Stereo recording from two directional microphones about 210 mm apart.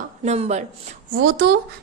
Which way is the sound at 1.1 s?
45° right (ahead or behind).